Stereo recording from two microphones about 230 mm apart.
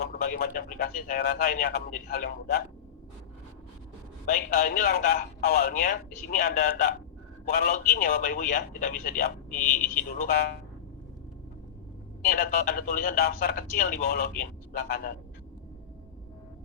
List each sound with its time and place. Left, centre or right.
0.0 s speech: left
4.3 s speech: left
9.5 s speech: centre
10.2 s speech: left
12.2 s speech: left